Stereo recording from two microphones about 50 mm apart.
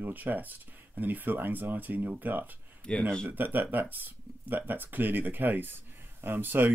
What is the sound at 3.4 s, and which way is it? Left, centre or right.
Speech, right.